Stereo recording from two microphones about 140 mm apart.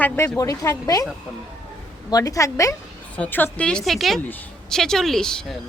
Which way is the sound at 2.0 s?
25° left (ahead or behind).